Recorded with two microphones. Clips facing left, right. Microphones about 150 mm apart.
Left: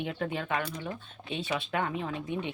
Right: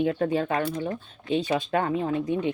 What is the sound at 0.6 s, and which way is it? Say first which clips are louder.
Speech: right 8 dB; 45° right (ahead or behind).